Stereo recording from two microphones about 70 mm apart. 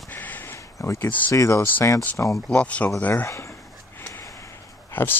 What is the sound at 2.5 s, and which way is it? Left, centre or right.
Speech, centre.